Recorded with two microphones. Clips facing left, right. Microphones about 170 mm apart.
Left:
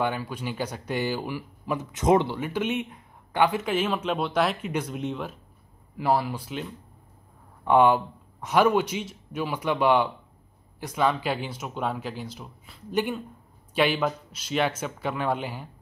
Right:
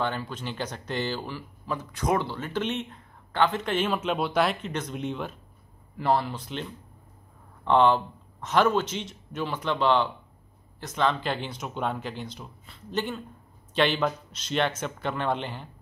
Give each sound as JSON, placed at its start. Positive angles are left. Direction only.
{"t": 0.0, "sound": "speech", "side_deg": 10}